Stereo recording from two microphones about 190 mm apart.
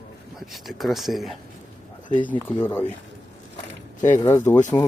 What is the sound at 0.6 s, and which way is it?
Speech, centre (ahead or behind).